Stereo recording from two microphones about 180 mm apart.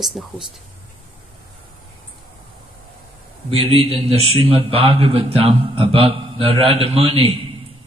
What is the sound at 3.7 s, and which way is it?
A man's voice, 30° right (ahead or behind).